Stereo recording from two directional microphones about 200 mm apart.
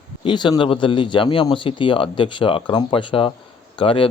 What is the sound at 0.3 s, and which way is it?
Speech, 20° left (ahead or behind).